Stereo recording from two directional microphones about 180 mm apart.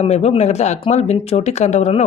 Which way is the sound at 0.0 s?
35° left (ahead or behind).